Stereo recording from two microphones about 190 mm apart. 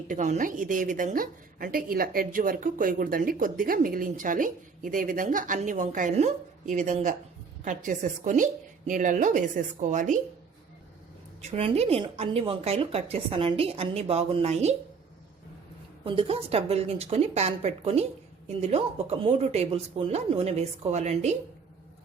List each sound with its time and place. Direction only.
0.1 s a woman's voice: 40° right (ahead or behind)
11.5 s a woman's voice: 30° right (ahead or behind)
16.0 s a woman's voice: 30° right (ahead or behind)